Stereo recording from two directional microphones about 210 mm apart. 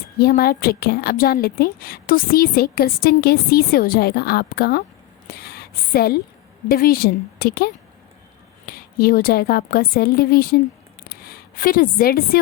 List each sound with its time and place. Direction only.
0.2 s a woman's voice: 45° left (ahead or behind)
5.3 s a sound: 45° left (ahead or behind)
6.7 s a woman's voice: 45° left (ahead or behind)